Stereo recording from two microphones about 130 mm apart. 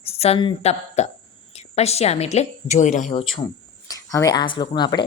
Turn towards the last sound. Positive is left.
turn(degrees=35)  # may be behind; listen again after turning